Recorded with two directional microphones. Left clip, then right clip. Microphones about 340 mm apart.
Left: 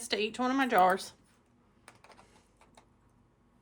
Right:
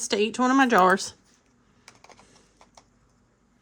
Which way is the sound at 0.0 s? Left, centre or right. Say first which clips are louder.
Right 8 dB; right.